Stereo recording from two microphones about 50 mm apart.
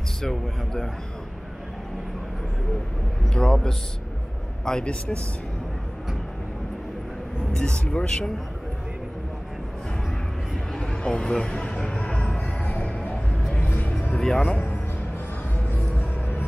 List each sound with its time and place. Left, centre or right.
0.2 s speech: centre
3.3 s speech: centre
7.5 s speech: centre
10.7 s music: centre; by 14.1 s left
14.1 s speech: centre
16.0 s music: left